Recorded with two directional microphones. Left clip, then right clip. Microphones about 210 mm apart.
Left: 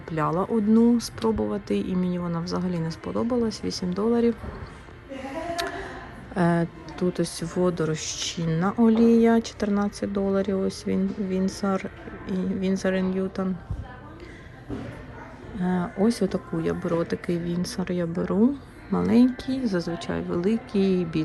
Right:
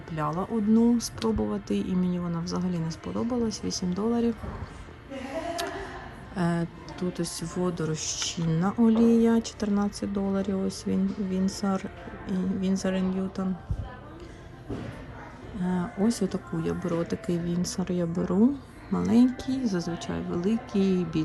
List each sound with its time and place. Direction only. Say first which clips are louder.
0.1 s speech: left 5 dB; 15° right (ahead or behind)
6.3 s speech: left 6 dB; 10° right (ahead or behind)
15.6 s speech: left 4 dB; 15° right (ahead or behind)